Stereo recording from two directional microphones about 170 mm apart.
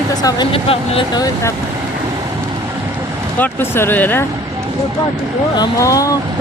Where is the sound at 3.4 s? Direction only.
15° left (ahead or behind).